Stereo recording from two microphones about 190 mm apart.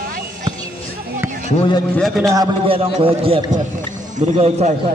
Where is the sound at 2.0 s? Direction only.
Centre (ahead or behind).